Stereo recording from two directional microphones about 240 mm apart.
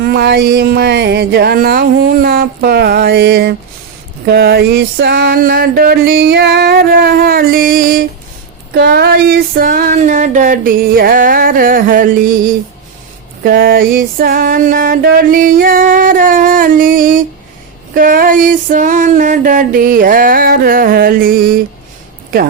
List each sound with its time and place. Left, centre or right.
0.0 s music: right
13.4 s music: right